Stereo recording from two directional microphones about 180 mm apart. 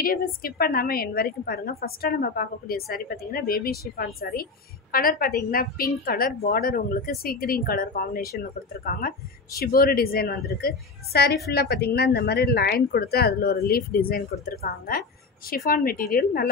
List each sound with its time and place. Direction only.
0.0 s a woman's voice: 55° left (ahead or behind)